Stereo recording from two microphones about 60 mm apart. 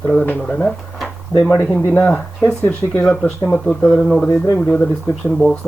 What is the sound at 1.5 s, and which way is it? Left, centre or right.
Speech, left.